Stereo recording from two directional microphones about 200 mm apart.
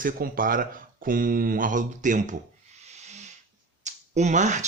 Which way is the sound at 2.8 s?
35° right (ahead or behind).